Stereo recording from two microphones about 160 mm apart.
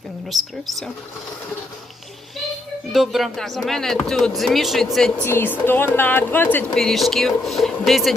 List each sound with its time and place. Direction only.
0.3 s speech: centre (ahead or behind)
2.9 s speech: centre (ahead or behind)
5.2 s a woman's voice: 15° left (ahead or behind)